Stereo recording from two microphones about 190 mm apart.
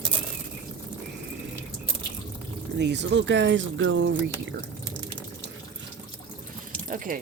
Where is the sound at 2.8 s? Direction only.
65° right (ahead or behind).